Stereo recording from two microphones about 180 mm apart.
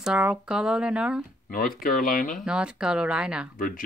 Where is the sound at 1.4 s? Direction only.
50° left (ahead or behind).